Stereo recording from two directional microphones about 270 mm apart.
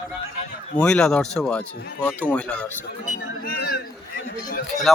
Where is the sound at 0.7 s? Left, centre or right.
Centre.